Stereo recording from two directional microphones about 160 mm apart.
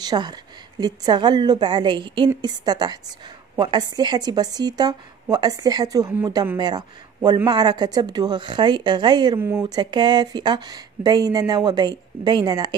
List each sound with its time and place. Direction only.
0.0 s speech: 25° right (ahead or behind)